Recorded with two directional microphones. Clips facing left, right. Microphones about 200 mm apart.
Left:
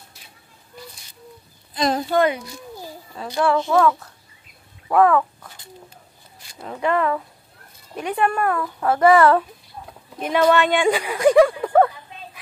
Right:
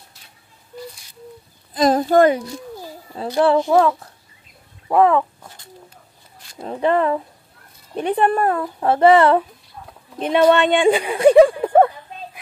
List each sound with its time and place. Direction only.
1.7 s a child's voice: 45° right (ahead or behind)
3.2 s a child's voice: 30° right (ahead or behind)
6.6 s a child's voice: 30° right (ahead or behind)